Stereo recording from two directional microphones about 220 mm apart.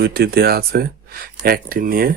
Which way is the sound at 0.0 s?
45° right (ahead or behind).